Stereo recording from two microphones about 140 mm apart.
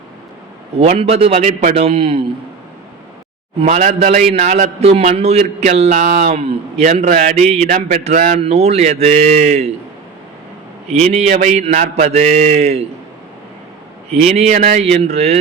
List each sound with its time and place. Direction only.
0.8 s a man's voice: 45° right (ahead or behind)
3.7 s a sound: 60° right (ahead or behind)
4.3 s a man's voice: 55° right (ahead or behind)
7.3 s a sound: 50° right (ahead or behind)
8.0 s speech: 70° right (ahead or behind)
8.4 s a man's voice: 50° right (ahead or behind)
10.9 s a sound: 50° right (ahead or behind)
14.1 s a man's voice: 50° right (ahead or behind); by 14.8 s 65° right (ahead or behind)
14.8 s a man's voice: 45° right (ahead or behind)